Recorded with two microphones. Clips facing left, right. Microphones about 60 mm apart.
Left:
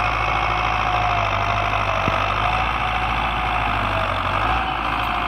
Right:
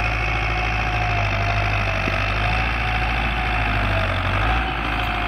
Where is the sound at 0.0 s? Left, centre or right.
Right.